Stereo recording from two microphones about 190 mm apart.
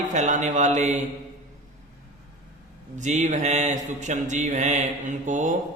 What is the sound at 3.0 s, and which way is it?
Mantra, 40° right (ahead or behind).